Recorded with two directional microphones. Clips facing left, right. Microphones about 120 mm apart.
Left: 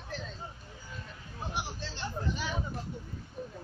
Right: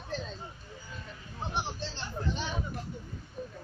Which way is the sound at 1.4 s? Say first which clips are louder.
Right 3 dB; 25° right (ahead or behind).